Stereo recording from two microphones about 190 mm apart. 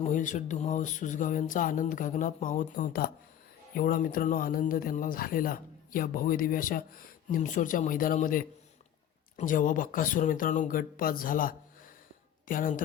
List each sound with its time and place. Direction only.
0.0 s speech: 40° left (ahead or behind)